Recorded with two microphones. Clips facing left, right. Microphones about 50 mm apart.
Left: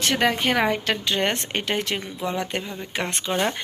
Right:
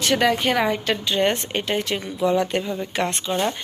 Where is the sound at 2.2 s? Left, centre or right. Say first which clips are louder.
Right 9 dB; left.